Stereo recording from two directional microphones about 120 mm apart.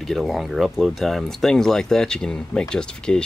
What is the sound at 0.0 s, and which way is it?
Speech, centre (ahead or behind).